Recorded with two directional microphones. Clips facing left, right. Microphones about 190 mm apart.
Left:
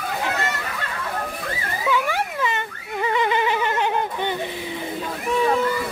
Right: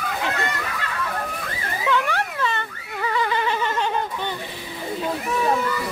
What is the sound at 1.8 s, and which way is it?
Mosquito, 10° left (ahead or behind).